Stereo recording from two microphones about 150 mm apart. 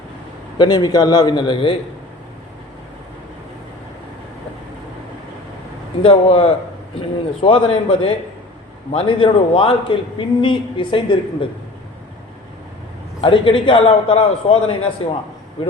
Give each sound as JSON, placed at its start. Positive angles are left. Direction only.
{"t": 0.6, "sound": "a man's voice", "side_deg": 30}
{"t": 6.0, "sound": "a man's voice", "side_deg": 40}
{"t": 13.2, "sound": "a man's voice", "side_deg": 35}